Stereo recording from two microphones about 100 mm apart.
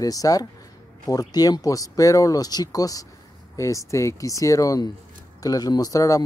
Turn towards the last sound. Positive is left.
turn(degrees=35)  # may be behind; listen again after turning